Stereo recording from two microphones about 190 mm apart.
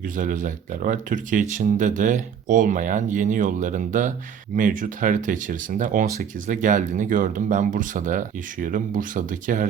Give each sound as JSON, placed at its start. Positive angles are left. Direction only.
{"t": 0.0, "sound": "speech", "side_deg": -45}